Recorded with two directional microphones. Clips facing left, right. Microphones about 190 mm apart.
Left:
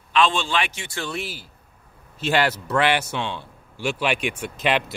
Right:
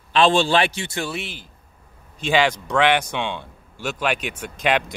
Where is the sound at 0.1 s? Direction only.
35° right (ahead or behind).